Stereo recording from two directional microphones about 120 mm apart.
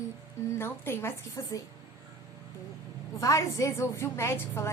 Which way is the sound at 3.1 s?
25° left (ahead or behind).